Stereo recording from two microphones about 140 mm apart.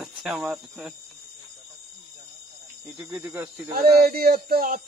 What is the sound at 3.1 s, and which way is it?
Speech, 20° right (ahead or behind).